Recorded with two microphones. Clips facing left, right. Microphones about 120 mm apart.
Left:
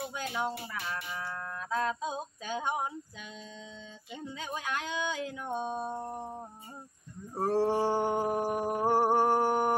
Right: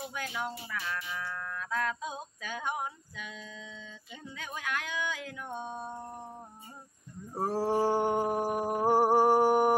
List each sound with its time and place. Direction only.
0.1 s speech: 25° left (ahead or behind)
7.3 s mantra: 5° right (ahead or behind)